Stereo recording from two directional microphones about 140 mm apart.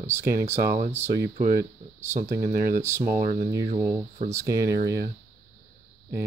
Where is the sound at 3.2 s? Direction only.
55° right (ahead or behind).